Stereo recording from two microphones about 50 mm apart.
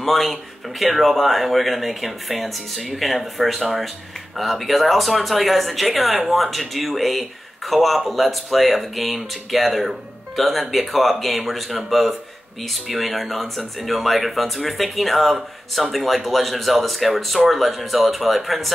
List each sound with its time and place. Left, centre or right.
0.0 s speech: centre